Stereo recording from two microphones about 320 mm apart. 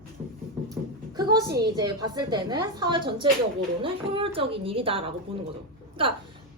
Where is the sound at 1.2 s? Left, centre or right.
Centre.